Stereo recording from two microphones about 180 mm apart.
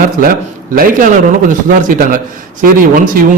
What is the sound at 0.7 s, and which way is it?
Speech, 50° right (ahead or behind).